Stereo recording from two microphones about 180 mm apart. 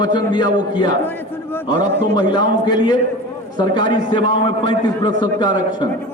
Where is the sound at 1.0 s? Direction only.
10° left (ahead or behind).